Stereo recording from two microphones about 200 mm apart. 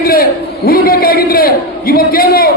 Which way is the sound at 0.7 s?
50° left (ahead or behind).